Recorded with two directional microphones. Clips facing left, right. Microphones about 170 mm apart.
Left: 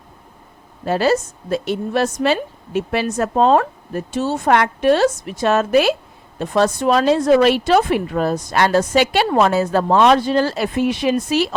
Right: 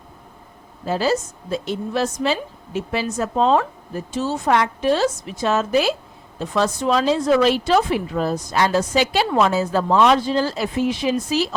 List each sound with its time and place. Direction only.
0.9 s speech: 65° left (ahead or behind)